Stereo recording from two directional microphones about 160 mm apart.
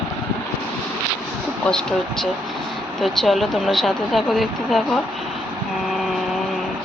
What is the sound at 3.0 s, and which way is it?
Speech, centre (ahead or behind).